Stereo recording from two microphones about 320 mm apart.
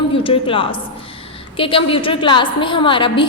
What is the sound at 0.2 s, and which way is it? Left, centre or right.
A woman's voice, centre.